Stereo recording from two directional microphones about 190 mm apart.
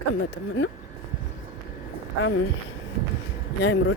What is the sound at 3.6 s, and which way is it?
Speech, 60° left (ahead or behind).